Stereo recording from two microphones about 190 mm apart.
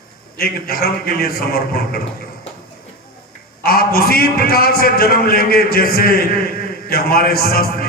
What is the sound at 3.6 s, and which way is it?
A man's voice, 50° left (ahead or behind).